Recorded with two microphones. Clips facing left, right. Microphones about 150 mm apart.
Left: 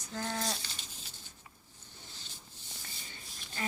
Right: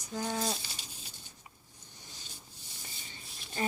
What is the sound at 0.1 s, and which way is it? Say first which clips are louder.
Speech: right 3 dB; 10° right (ahead or behind).